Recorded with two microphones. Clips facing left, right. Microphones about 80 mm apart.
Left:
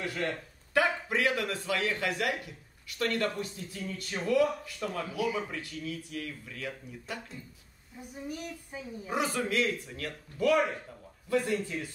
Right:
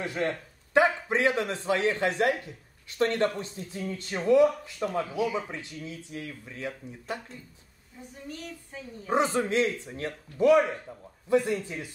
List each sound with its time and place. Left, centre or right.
0.0 s a man's voice: right
8.0 s a woman's voice: centre
9.1 s a man's voice: right